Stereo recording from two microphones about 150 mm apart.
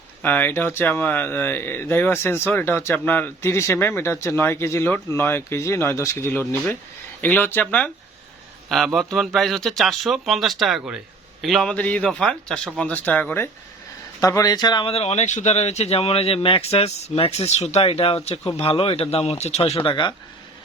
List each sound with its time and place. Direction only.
0.2 s speech: 10° left (ahead or behind); by 14.9 s 30° left (ahead or behind)
14.9 s speech: 45° left (ahead or behind)
19.8 s speech: 30° left (ahead or behind)